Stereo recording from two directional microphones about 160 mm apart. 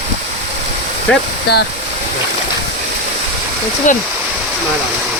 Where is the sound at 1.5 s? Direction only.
90° left.